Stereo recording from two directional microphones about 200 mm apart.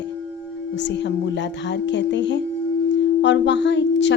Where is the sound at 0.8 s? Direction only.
60° left (ahead or behind).